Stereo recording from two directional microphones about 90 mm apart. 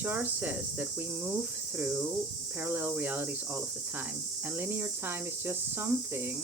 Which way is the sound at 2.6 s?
20° right (ahead or behind).